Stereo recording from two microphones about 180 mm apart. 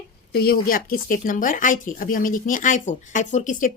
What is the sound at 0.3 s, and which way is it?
Speech, 55° left (ahead or behind).